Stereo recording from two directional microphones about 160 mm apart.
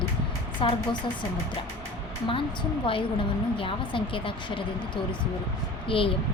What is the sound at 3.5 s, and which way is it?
A woman's voice, 35° left (ahead or behind).